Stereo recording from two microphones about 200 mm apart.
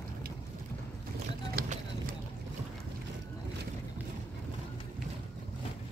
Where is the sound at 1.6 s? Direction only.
45° right (ahead or behind).